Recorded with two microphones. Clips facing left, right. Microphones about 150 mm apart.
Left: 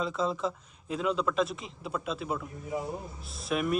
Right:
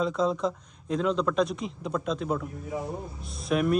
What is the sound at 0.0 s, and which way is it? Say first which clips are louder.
Speech: right 4 dB; centre (ahead or behind).